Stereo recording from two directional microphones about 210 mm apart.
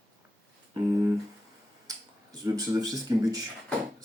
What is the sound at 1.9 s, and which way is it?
Speech, 15° right (ahead or behind).